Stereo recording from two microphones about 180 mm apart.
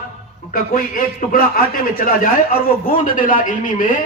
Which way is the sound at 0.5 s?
50° left (ahead or behind).